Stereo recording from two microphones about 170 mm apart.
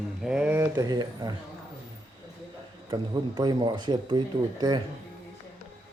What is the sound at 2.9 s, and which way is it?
Speech, 25° right (ahead or behind).